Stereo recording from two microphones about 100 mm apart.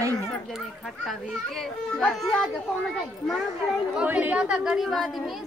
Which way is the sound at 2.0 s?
10° left (ahead or behind).